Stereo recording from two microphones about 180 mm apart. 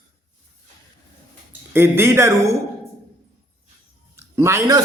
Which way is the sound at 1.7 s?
15° right (ahead or behind).